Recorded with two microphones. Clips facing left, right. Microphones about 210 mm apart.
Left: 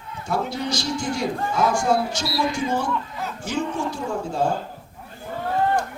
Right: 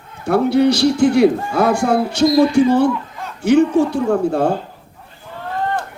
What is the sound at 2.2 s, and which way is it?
Speech, 45° right (ahead or behind).